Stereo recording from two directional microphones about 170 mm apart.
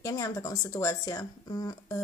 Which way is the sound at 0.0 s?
20° left (ahead or behind).